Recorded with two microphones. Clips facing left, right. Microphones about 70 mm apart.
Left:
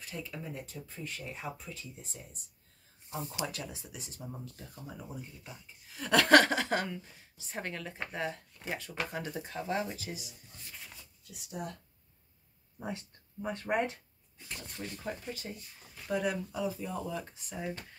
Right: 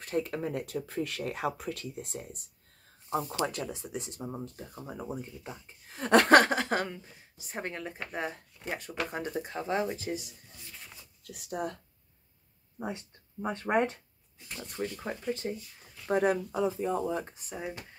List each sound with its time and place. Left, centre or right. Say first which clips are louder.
0.0 s speech: right 10 dB; right
3.1 s speech: right 7 dB; right
5.0 s speech: right 7 dB; right
11.2 s speech: right 6 dB; right
12.8 s speech: right 3 dB; right
17.6 s speech: even; centre